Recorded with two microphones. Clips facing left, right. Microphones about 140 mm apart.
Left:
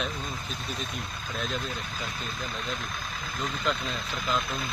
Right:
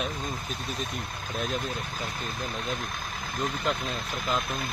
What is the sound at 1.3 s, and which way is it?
Speech, 50° right (ahead or behind).